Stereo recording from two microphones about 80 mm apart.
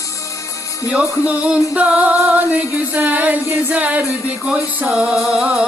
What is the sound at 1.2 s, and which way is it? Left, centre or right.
Music, centre.